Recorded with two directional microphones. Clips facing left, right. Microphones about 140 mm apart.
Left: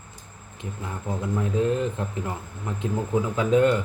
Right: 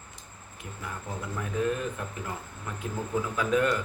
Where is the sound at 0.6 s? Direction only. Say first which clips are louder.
Left 5 dB; 25° left (ahead or behind).